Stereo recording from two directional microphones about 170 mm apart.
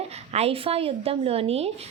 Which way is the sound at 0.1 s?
40° right (ahead or behind).